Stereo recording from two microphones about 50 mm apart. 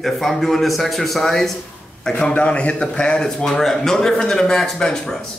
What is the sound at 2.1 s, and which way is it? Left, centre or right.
A man's voice, left.